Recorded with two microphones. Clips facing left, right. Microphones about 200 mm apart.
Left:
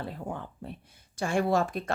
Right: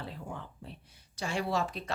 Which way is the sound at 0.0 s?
50° left (ahead or behind).